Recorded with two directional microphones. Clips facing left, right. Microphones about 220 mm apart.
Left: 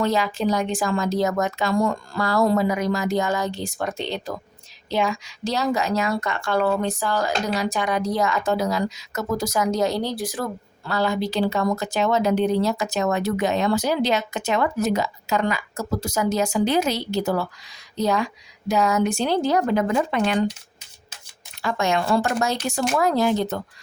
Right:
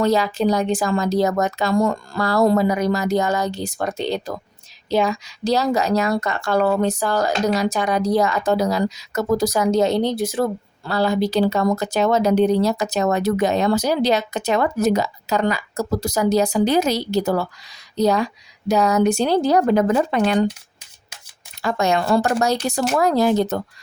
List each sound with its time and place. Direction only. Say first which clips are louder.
0.0 s a woman's voice: right 4 dB; 35° right (ahead or behind)
21.6 s a woman's voice: right 3 dB; 40° right (ahead or behind)